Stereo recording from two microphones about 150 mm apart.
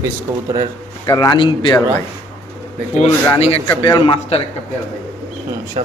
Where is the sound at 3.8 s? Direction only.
35° left (ahead or behind).